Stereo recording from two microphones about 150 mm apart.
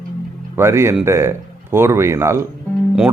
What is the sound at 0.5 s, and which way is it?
Speech, 15° right (ahead or behind).